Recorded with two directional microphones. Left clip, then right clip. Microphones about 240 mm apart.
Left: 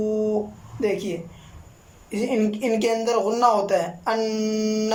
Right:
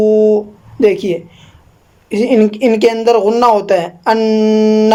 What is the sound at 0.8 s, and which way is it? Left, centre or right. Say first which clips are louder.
Speech: right 13 dB; right.